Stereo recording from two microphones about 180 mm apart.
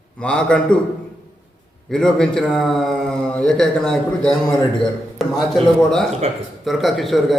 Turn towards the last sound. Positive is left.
turn(degrees=0)  # may be behind; listen again after turning